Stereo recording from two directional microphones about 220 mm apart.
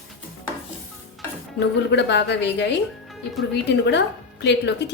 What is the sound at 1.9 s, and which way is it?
A woman's voice, 50° left (ahead or behind).